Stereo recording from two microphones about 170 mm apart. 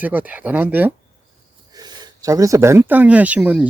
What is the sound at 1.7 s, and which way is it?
Speech, 25° right (ahead or behind).